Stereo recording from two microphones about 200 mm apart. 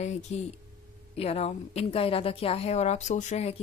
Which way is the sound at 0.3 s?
35° left (ahead or behind).